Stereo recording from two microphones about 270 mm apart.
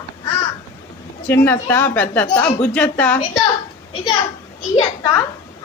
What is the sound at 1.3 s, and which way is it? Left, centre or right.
A woman's voice, centre.